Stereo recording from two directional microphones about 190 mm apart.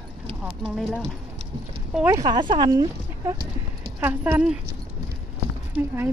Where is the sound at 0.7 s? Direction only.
Centre (ahead or behind).